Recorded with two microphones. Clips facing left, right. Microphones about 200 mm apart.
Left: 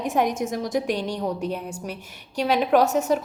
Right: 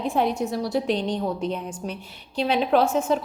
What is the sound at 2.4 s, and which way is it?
Speech, 45° left (ahead or behind).